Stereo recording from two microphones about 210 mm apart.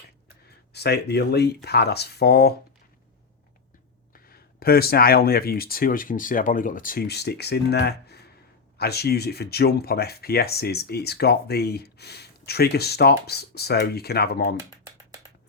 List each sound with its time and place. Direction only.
0.4 s speech: 50° left (ahead or behind)
4.1 s speech: 45° left (ahead or behind)